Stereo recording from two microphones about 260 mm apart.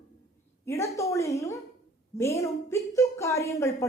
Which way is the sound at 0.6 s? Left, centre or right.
Centre.